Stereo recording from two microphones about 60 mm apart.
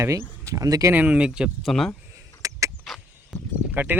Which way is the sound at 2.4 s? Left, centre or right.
Right.